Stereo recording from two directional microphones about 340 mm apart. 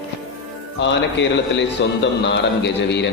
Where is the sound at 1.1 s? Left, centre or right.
Left.